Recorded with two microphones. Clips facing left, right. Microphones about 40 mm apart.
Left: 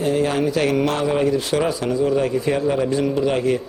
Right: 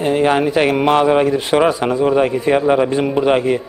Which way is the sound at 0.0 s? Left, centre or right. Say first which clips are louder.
Right 5 dB; right.